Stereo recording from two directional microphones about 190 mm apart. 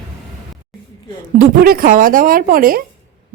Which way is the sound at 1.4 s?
50° right (ahead or behind).